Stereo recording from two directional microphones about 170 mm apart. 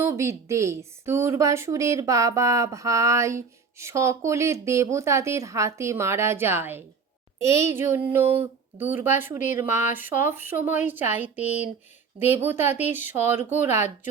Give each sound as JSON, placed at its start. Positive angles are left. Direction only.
{"t": 0.0, "sound": "a woman's voice", "side_deg": -15}